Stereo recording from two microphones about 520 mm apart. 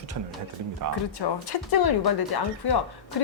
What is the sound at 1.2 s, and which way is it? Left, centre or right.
Speech, left.